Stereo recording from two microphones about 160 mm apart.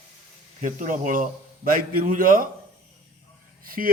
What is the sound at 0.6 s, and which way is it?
A man's voice, 55° right (ahead or behind).